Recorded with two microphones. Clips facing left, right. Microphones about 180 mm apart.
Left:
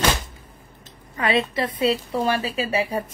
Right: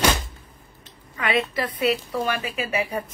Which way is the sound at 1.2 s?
30° left (ahead or behind).